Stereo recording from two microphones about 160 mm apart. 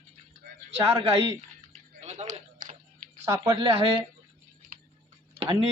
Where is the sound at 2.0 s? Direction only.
45° right (ahead or behind).